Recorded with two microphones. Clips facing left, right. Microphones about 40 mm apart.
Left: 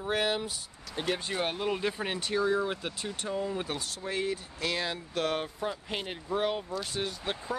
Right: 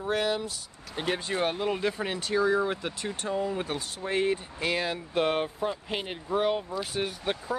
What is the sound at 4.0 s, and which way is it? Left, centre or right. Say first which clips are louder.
Speech: right 7 dB; right.